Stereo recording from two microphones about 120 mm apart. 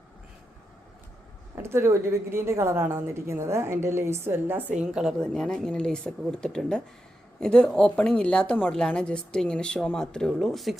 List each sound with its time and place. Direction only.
1.5 s a woman's voice: 20° right (ahead or behind)
4.8 s speech: 5° right (ahead or behind)
5.2 s speech: 5° left (ahead or behind)